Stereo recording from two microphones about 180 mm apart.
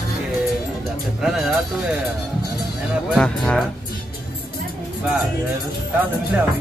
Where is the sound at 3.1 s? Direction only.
5° left (ahead or behind).